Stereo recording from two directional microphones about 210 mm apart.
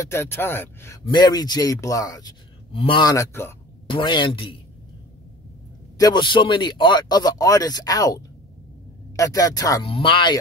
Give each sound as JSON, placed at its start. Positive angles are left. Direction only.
{"t": 0.0, "sound": "a man's voice", "side_deg": 10}
{"t": 5.9, "sound": "a man's voice", "side_deg": 20}